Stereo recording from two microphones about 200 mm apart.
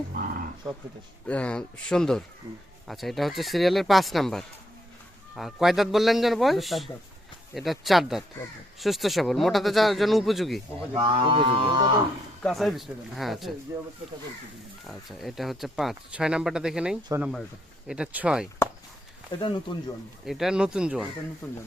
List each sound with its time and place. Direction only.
1.3 s speech: 5° left (ahead or behind)
10.9 s speech: 25° right (ahead or behind)
12.4 s speech: centre (ahead or behind)
14.8 s speech: centre (ahead or behind)
19.3 s speech: 25° left (ahead or behind)
20.2 s speech: centre (ahead or behind)